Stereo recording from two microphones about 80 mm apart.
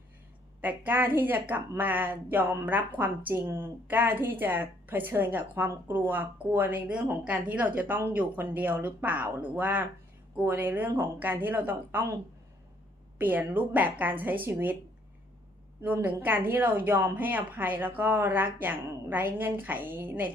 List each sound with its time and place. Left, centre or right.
0.6 s speech: right
13.1 s speech: right
16.2 s speech: right